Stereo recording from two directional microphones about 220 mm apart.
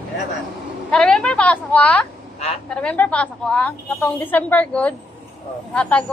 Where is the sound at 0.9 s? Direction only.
5° left (ahead or behind).